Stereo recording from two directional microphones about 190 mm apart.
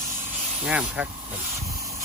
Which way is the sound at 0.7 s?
5° right (ahead or behind).